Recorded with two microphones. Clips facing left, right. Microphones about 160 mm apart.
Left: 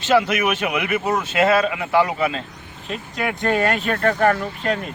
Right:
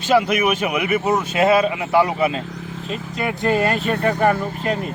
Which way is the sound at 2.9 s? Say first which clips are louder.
Even; centre (ahead or behind).